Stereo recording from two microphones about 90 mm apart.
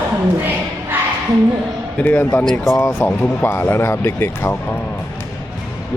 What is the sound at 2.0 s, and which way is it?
Speech, 25° left (ahead or behind).